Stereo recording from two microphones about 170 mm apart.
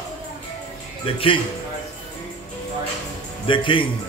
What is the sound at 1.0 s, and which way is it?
Speech, 30° left (ahead or behind).